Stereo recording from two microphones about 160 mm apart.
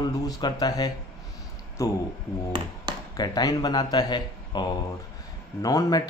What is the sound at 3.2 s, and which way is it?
Speech, 25° left (ahead or behind).